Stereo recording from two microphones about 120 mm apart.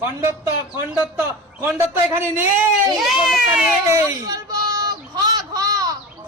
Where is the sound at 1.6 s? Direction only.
15° right (ahead or behind).